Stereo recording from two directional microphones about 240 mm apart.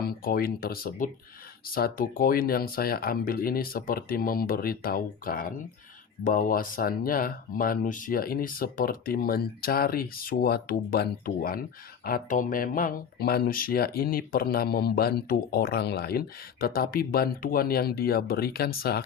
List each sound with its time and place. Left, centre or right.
0.0 s speech: left